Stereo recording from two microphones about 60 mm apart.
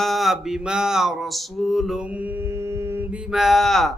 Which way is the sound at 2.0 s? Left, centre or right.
Right.